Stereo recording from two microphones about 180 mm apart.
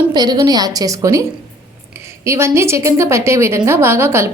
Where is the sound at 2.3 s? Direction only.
15° right (ahead or behind).